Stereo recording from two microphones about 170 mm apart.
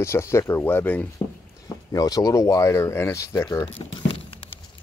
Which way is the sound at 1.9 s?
20° left (ahead or behind).